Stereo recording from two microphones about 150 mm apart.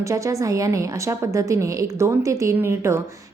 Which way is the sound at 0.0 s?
20° right (ahead or behind).